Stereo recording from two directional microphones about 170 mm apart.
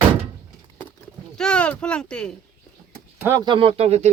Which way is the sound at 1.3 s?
5° left (ahead or behind).